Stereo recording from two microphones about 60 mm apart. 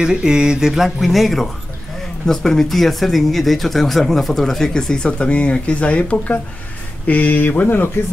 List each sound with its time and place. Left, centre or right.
0.0 s speech: centre; by 8.0 s left